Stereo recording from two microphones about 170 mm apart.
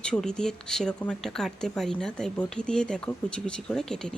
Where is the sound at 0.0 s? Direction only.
5° left (ahead or behind).